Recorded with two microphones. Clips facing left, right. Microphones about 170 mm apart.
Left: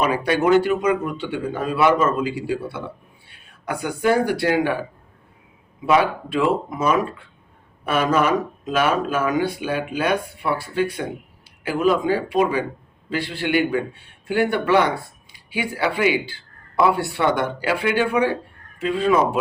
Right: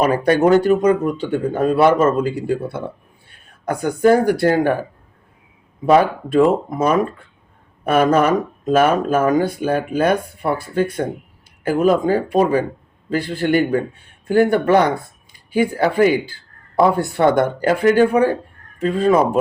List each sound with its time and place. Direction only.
0.0 s a man's voice: 45° right (ahead or behind)